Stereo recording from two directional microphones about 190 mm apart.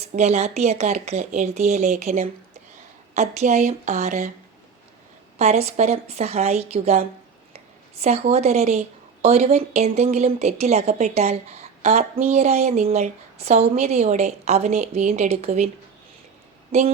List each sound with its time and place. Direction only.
0.0 s speech: 35° right (ahead or behind)
5.4 s speech: 35° right (ahead or behind)
7.5 s a sound: 35° right (ahead or behind)
8.3 s speech: 35° right (ahead or behind)
16.7 s speech: 35° right (ahead or behind)